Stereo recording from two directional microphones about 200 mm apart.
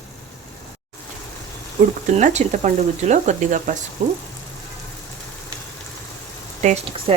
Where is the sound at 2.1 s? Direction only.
35° right (ahead or behind).